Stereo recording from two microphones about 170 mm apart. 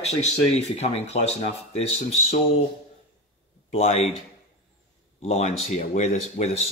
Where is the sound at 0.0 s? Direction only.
40° left (ahead or behind).